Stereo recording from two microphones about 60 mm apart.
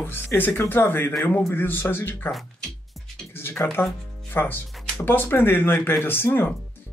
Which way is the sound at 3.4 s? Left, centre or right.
Left.